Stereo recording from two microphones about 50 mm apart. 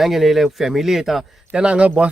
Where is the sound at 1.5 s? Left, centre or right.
Right.